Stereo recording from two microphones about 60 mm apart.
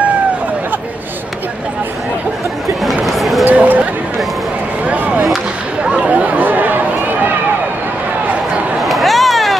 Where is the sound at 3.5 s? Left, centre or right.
Right.